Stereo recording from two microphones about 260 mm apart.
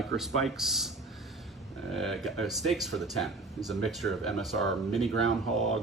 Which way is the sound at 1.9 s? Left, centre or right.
Centre.